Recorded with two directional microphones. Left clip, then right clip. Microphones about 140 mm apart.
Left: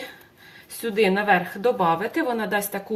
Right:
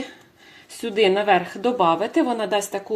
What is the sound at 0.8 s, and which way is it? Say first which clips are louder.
A woman's voice: right 2 dB; 25° right (ahead or behind).